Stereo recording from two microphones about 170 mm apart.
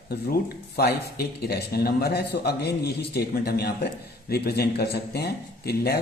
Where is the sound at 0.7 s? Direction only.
65° left (ahead or behind).